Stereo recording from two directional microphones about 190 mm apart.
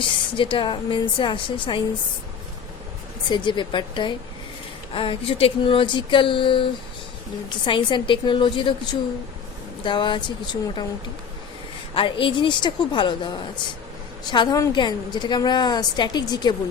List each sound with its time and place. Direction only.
0.0 s a woman's voice: 25° left (ahead or behind)
3.3 s a woman's voice: 25° left (ahead or behind)
11.9 s a woman's voice: 25° left (ahead or behind)